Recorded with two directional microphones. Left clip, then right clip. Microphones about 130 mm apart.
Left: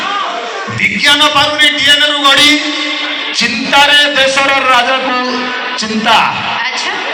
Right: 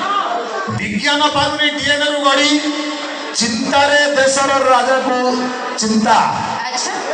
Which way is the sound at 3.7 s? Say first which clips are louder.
Left 5 dB; 40° right (ahead or behind).